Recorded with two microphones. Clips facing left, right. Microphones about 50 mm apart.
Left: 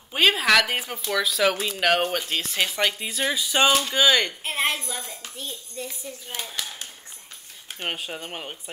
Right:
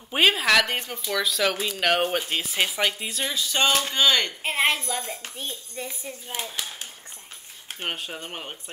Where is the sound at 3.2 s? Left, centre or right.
Centre.